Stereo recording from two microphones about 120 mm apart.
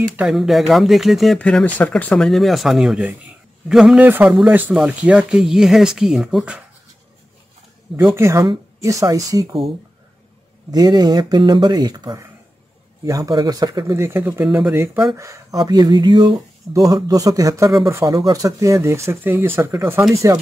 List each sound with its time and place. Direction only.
0.3 s speech: centre (ahead or behind)
4.5 s speech: 15° right (ahead or behind)
7.9 s speech: 20° right (ahead or behind)
10.7 s speech: 35° right (ahead or behind)
13.9 s speech: 20° right (ahead or behind)
15.1 s speech: 25° right (ahead or behind)